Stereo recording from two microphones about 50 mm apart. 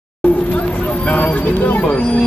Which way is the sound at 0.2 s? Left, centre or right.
Left.